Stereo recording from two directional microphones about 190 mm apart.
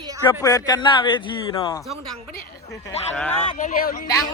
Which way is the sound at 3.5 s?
45° left (ahead or behind).